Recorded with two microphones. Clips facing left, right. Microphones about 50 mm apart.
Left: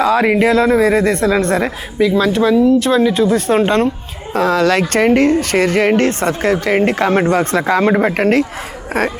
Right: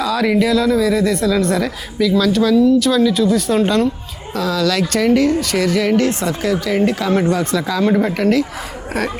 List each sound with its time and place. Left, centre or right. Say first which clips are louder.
0.0 s speech: left 4 dB; left